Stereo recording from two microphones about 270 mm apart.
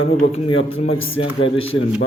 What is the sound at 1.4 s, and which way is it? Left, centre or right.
Speech, left.